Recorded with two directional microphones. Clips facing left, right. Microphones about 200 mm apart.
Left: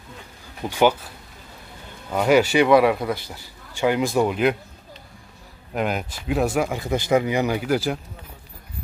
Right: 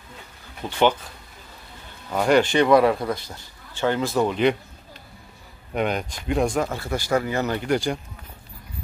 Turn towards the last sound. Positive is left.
turn(degrees=5)  # may be behind; listen again after turning